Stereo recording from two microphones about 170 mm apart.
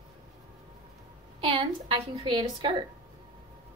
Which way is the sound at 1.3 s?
30° right (ahead or behind).